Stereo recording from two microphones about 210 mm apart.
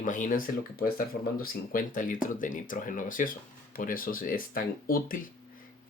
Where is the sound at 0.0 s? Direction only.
40° left (ahead or behind).